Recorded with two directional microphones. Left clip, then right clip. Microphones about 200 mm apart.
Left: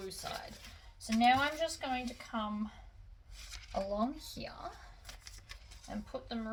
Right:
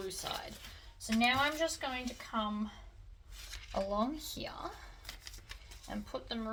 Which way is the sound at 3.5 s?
10° right (ahead or behind).